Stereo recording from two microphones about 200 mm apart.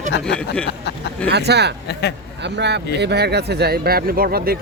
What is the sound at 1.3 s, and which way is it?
Speech, 55° right (ahead or behind).